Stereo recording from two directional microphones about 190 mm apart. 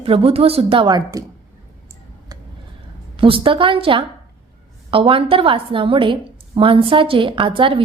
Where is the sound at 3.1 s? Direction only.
25° right (ahead or behind).